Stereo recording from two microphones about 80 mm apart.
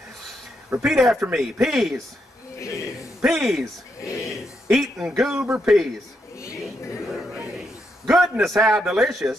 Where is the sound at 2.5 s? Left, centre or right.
Left.